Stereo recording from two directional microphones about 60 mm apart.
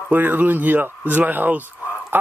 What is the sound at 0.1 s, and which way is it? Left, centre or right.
Speech, right.